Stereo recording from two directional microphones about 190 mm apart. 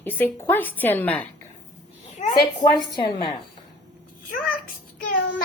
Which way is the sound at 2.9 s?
25° left (ahead or behind).